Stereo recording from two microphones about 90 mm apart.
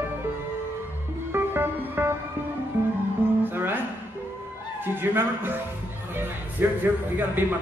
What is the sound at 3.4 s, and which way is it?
Music, 20° right (ahead or behind).